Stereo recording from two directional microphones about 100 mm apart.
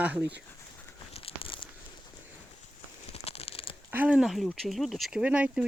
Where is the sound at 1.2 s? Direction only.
70° left (ahead or behind).